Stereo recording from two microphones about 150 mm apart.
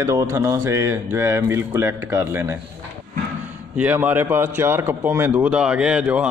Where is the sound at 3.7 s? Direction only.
10° right (ahead or behind).